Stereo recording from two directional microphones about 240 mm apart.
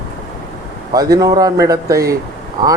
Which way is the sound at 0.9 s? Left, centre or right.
Centre.